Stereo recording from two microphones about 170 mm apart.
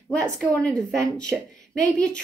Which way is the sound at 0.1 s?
5° left (ahead or behind).